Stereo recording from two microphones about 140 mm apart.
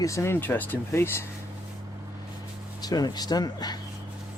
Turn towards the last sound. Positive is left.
turn(degrees=30)  # may be behind; listen again after turning